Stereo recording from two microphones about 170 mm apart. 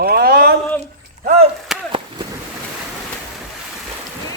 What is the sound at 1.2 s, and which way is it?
Speech, 40° right (ahead or behind).